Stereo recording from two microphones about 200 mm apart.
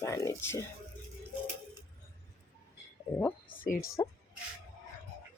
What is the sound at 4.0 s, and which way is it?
Speech, 20° left (ahead or behind).